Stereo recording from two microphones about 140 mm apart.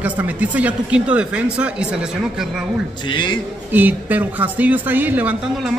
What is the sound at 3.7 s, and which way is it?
Speech, 10° right (ahead or behind).